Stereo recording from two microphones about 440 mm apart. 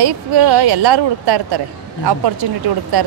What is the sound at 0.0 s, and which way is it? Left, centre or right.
Speech, right.